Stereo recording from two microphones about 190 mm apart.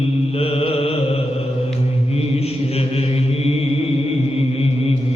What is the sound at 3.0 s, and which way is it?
Mantra, 30° left (ahead or behind).